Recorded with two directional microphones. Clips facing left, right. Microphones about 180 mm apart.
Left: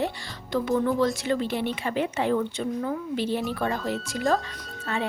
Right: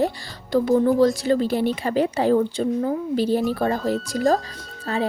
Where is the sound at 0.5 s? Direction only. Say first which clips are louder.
Right 6 dB; 35° right (ahead or behind).